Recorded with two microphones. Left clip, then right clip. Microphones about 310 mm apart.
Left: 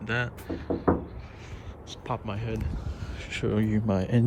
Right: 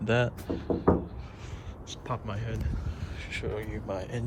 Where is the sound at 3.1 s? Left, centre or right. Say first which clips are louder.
Left 5 dB; left.